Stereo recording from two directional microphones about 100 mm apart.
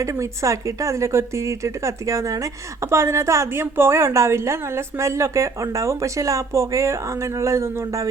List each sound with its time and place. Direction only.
0.0 s speech: 30° right (ahead or behind)